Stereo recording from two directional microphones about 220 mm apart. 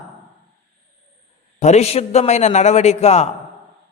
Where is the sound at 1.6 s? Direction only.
30° left (ahead or behind).